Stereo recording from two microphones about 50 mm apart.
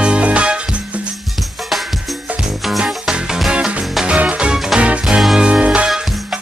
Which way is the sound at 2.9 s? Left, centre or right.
Centre.